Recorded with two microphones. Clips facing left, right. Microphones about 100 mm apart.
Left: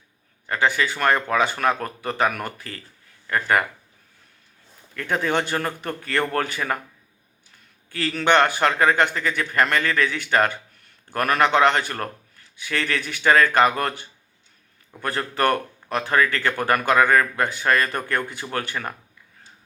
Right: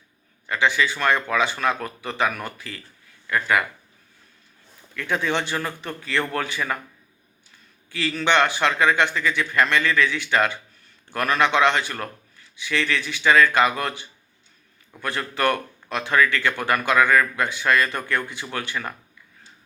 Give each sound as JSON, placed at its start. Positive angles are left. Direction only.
{"t": 0.4, "sound": "speech", "side_deg": 40}
{"t": 4.9, "sound": "a man's voice", "side_deg": 45}
{"t": 7.9, "sound": "a man's voice", "side_deg": 45}